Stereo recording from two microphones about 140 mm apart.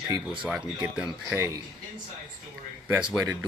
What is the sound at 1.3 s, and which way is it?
Speech, 20° right (ahead or behind).